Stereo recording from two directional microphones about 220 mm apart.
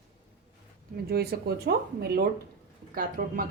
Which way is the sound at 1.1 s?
45° right (ahead or behind).